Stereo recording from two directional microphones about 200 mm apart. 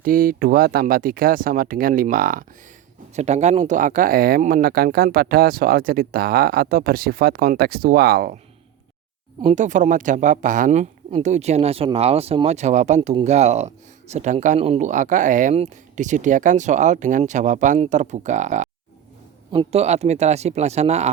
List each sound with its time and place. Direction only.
0.0 s speech: 45° right (ahead or behind)
9.4 s speech: 35° right (ahead or behind)